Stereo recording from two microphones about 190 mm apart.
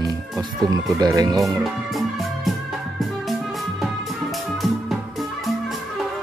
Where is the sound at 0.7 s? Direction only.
20° right (ahead or behind).